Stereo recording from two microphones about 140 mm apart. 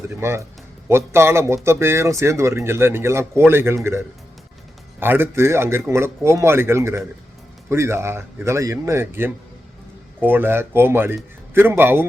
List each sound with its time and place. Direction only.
0.1 s speech: 20° right (ahead or behind)
4.9 s speech: 15° right (ahead or behind)